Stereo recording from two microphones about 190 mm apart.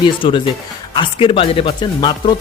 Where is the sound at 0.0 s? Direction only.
25° left (ahead or behind).